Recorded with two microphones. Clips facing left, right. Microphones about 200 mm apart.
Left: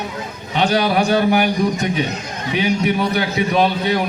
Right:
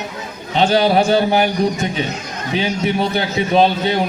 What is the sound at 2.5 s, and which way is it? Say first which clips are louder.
A man's voice: left 1 dB; 30° right (ahead or behind).